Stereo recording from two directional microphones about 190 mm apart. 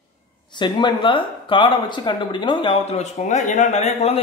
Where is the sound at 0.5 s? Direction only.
25° left (ahead or behind).